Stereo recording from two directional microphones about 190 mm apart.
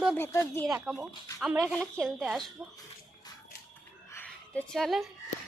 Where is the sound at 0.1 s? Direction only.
15° left (ahead or behind).